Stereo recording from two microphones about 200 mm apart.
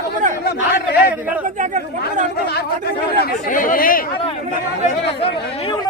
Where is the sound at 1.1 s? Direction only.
10° right (ahead or behind).